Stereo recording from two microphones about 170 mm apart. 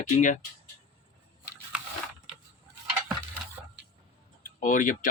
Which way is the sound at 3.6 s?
10° right (ahead or behind).